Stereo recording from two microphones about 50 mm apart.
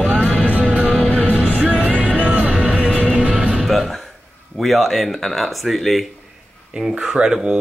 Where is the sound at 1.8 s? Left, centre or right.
Right.